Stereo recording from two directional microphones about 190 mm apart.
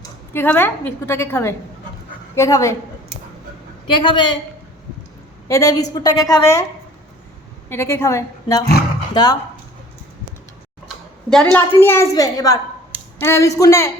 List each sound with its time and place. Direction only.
0.0 s a woman's voice: 10° left (ahead or behind)
3.9 s a woman's voice: 25° left (ahead or behind)
5.5 s a woman's voice: 15° left (ahead or behind)
7.7 s a child's voice: 15° left (ahead or behind)
10.8 s a sound: centre (ahead or behind)
11.5 s a child's voice: 10° left (ahead or behind)